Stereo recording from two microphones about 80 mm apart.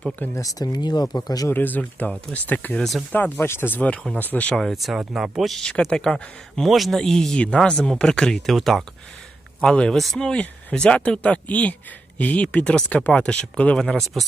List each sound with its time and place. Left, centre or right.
0.3 s speech: left
0.7 s speech: left
1.5 s speech: left
2.7 s speech: centre
3.1 s speech: centre
4.5 s speech: centre
9.6 s speech: centre